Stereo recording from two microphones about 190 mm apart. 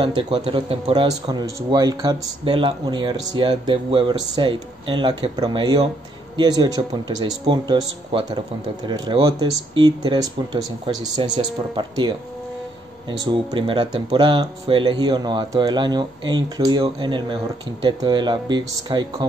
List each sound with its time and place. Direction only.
0.0 s speech: 30° right (ahead or behind)
13.2 s speech: 25° right (ahead or behind)